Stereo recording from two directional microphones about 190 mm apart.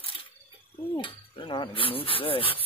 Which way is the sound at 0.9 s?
25° left (ahead or behind).